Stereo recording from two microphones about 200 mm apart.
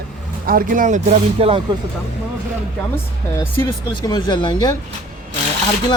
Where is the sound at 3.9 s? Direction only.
20° left (ahead or behind).